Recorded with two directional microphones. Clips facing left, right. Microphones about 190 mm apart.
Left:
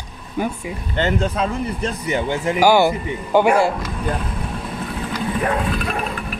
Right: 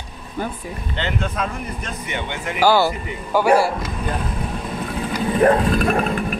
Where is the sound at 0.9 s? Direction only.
45° left (ahead or behind).